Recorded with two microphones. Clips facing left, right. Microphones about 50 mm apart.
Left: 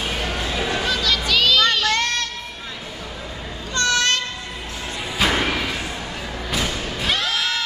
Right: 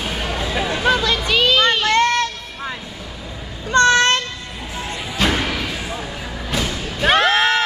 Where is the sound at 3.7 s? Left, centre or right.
Right.